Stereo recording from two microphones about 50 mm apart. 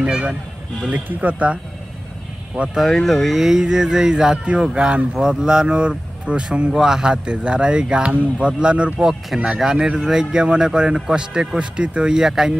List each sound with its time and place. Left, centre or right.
0.0 s speech: centre
0.9 s speech: right
2.8 s speech: centre; by 6.7 s right
6.7 s speech: centre
9.5 s speech: centre